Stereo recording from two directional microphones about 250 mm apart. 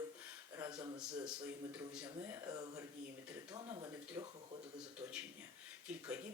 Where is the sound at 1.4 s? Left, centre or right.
Centre.